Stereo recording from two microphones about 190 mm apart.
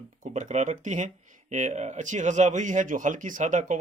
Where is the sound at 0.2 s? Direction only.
40° right (ahead or behind).